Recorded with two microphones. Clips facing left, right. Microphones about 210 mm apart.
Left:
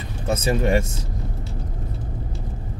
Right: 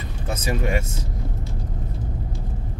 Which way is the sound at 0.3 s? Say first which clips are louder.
Left 5 dB; 30° left (ahead or behind).